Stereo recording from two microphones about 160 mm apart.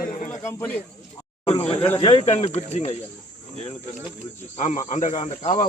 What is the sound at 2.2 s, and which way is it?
Speech, 45° left (ahead or behind).